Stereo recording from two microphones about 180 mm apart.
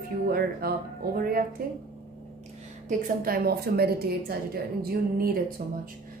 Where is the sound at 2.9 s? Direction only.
50° right (ahead or behind).